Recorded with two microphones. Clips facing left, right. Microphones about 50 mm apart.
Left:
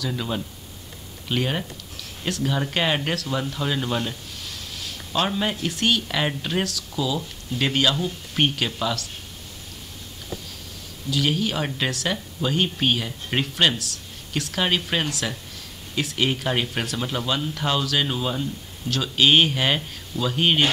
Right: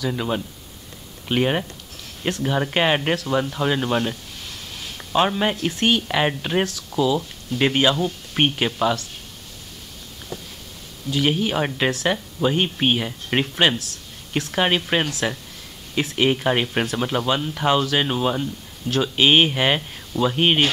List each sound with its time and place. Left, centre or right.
0.0 s speech: centre
11.1 s speech: right